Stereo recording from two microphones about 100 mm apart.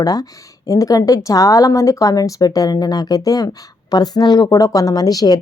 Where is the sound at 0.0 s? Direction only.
40° left (ahead or behind).